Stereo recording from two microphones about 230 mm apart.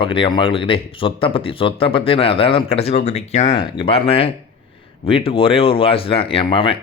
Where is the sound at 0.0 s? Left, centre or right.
Left.